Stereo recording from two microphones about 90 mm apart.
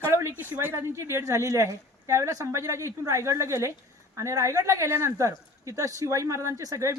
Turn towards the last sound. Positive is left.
turn(degrees=-35)  # may be behind; listen again after turning